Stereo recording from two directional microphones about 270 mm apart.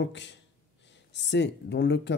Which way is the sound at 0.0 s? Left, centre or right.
Left.